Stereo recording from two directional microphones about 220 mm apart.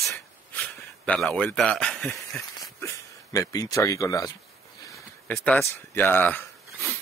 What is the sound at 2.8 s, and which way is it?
Speech, 15° left (ahead or behind).